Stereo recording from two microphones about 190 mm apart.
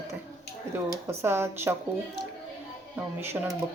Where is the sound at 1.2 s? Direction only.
15° right (ahead or behind).